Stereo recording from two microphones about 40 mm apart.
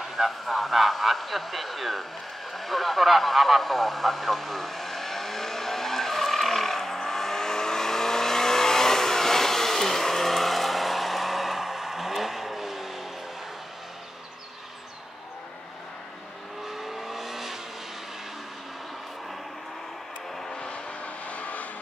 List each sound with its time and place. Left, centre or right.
0.5 s speech: centre
2.5 s vehicle: centre
16.6 s vehicle: centre
20.3 s vehicle: centre
21.0 s vehicle: left